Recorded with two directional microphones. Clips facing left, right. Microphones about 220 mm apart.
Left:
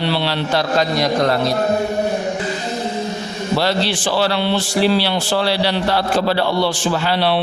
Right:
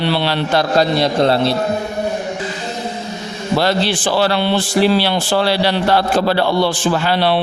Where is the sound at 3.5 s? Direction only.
50° right (ahead or behind).